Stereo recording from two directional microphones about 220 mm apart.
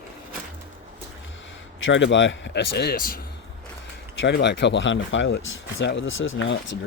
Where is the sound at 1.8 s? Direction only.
55° left (ahead or behind).